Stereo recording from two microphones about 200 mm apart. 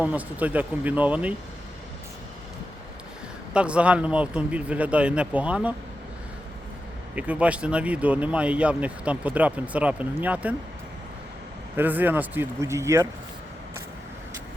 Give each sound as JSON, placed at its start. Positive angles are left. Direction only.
{"t": 0.0, "sound": "speech", "side_deg": -10}
{"t": 3.5, "sound": "speech", "side_deg": -5}
{"t": 7.2, "sound": "speech", "side_deg": -5}
{"t": 11.8, "sound": "speech", "side_deg": -10}